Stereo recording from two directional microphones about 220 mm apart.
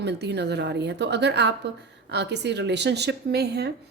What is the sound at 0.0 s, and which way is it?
A woman's voice, 50° right (ahead or behind).